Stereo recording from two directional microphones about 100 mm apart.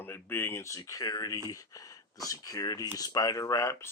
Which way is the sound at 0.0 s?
20° left (ahead or behind).